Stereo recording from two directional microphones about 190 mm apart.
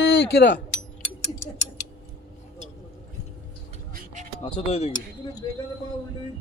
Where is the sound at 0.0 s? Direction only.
80° left.